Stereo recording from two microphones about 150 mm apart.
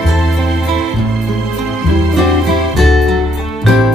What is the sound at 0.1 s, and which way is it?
Music, centre (ahead or behind).